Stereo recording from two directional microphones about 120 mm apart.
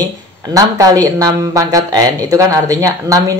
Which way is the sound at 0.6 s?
30° right (ahead or behind).